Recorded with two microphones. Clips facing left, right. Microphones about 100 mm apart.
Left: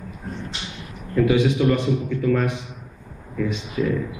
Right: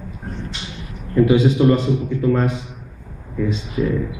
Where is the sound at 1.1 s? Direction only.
25° right (ahead or behind).